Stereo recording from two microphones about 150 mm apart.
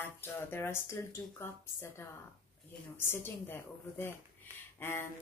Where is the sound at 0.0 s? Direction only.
15° left (ahead or behind).